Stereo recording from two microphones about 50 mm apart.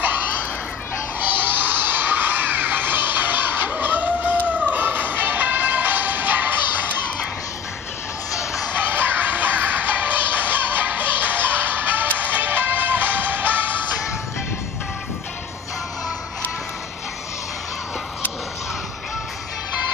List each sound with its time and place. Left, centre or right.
1.4 s music: right
8.7 s music: right